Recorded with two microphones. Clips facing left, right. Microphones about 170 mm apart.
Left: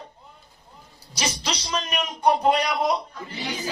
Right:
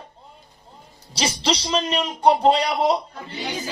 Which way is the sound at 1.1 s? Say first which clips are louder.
Right 6 dB; 30° right (ahead or behind).